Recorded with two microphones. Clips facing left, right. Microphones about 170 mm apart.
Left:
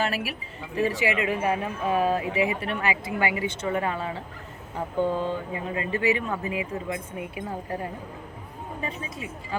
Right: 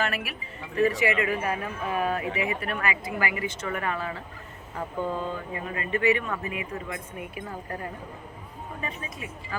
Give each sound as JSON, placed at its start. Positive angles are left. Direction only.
{"t": 0.0, "sound": "speech", "side_deg": 30}